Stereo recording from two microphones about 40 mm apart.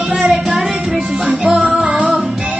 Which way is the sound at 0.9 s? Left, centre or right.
Centre.